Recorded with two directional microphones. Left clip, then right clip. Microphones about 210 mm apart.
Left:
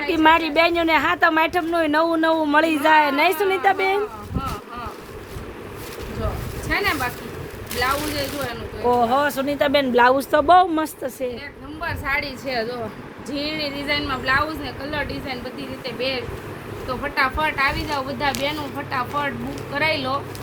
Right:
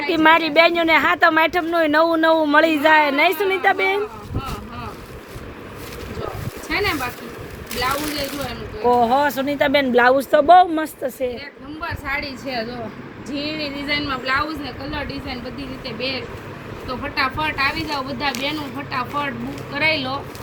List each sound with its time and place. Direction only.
0.1 s a woman's voice: 5° right (ahead or behind)
6.7 s a sound: 35° left (ahead or behind)
8.9 s a woman's voice: 10° right (ahead or behind)
11.8 s a woman's voice: 45° left (ahead or behind); by 20.1 s 20° left (ahead or behind)